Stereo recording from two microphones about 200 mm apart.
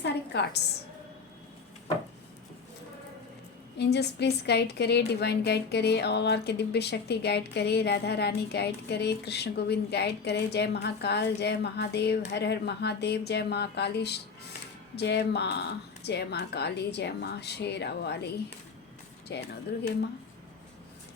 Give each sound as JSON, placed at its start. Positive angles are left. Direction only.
{"t": 0.0, "sound": "a sound", "side_deg": 55}
{"t": 3.8, "sound": "a woman's voice", "side_deg": 55}
{"t": 19.3, "sound": "a woman's voice", "side_deg": 55}